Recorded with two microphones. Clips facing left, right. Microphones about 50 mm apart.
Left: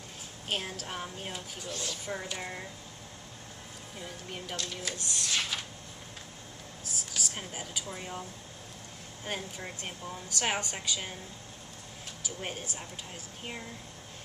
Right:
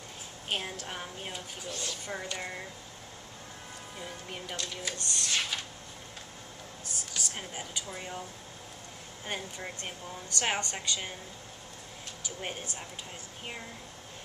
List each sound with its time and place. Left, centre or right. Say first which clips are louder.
0.5 s a woman's voice: even; centre
4.0 s a woman's voice: even; centre
7.2 s a woman's voice: even; centre
9.2 s a woman's voice: even; centre
12.4 s a woman's voice: even; centre